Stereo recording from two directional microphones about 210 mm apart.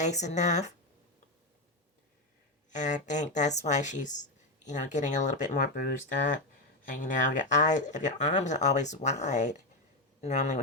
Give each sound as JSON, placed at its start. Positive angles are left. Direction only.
{"t": 0.0, "sound": "speech", "side_deg": 35}
{"t": 2.6, "sound": "speech", "side_deg": 35}
{"t": 6.8, "sound": "a man's voice", "side_deg": 40}